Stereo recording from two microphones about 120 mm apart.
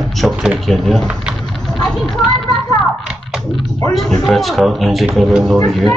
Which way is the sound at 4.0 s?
5° left (ahead or behind).